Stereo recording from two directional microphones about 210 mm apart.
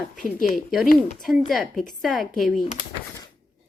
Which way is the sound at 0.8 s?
45° left (ahead or behind).